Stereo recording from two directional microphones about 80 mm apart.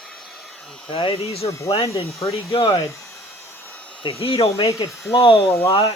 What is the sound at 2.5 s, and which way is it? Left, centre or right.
Speech, left.